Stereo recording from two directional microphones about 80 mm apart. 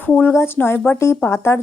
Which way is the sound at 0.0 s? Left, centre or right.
Left.